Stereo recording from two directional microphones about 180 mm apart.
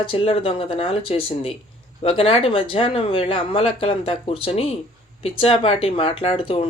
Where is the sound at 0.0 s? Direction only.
30° left (ahead or behind).